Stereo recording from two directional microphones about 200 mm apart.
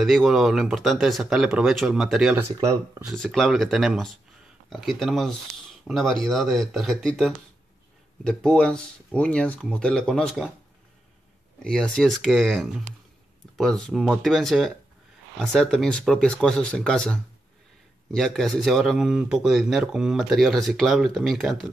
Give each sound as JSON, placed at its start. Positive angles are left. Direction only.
{"t": 0.0, "sound": "a man's voice", "side_deg": 0}
{"t": 2.5, "sound": "speech", "side_deg": -15}
{"t": 3.0, "sound": "a man's voice", "side_deg": 0}
{"t": 11.6, "sound": "a man's voice", "side_deg": 5}